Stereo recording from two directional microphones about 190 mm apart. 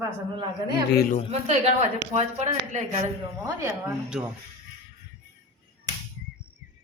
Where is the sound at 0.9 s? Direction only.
50° left (ahead or behind).